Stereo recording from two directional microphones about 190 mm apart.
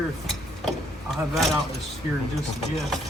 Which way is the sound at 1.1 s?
Centre (ahead or behind).